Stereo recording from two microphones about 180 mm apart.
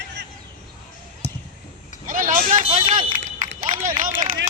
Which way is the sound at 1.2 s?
35° right (ahead or behind).